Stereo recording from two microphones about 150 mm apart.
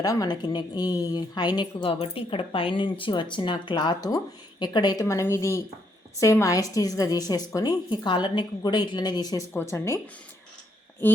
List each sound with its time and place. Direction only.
0.0 s a woman's voice: 25° left (ahead or behind)